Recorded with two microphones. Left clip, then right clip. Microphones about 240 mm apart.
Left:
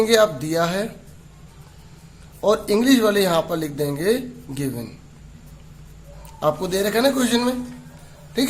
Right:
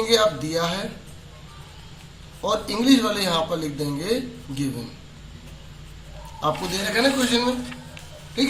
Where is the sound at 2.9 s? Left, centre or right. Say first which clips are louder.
Left 2 dB; left.